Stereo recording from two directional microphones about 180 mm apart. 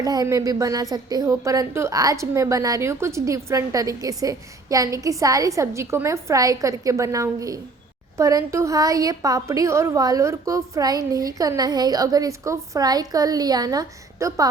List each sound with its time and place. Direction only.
0.0 s a woman's voice: 20° right (ahead or behind)